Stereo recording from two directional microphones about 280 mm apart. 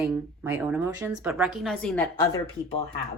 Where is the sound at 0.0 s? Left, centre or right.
Centre.